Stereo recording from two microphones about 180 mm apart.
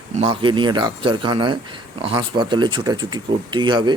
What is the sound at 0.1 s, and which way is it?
Speech, 35° right (ahead or behind).